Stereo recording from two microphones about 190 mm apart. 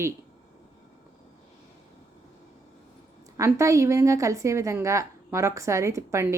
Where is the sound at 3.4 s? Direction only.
15° right (ahead or behind).